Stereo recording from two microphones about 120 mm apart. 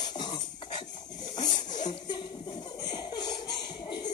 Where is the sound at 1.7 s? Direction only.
90° left.